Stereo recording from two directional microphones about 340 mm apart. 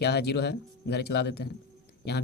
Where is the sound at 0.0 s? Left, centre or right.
Left.